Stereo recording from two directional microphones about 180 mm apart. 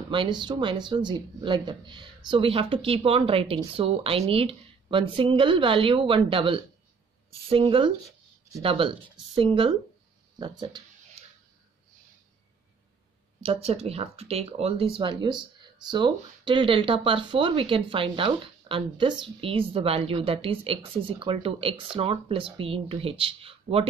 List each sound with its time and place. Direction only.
0.1 s speech: 25° right (ahead or behind)
13.4 s speech: 35° right (ahead or behind)